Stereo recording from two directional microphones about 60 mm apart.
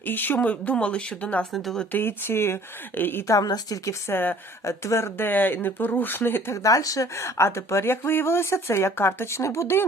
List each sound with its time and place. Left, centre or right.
0.0 s speech: left
1.5 s speech: centre
1.9 s speech: left
3.2 s a woman's voice: left
4.1 s speech: left
4.6 s speech: left
6.5 s speech: left
7.2 s speech: left